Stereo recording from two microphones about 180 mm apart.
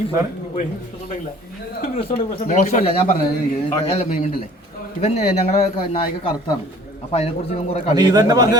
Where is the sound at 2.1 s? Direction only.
35° left (ahead or behind).